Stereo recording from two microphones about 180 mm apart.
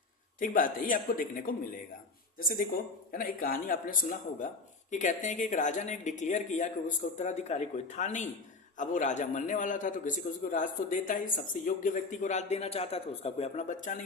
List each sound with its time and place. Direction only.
0.3 s a man's voice: 50° left (ahead or behind)